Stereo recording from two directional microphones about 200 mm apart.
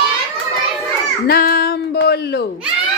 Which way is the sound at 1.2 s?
50° left (ahead or behind).